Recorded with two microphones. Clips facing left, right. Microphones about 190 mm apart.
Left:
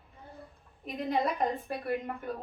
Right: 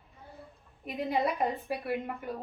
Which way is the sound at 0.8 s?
5° right (ahead or behind).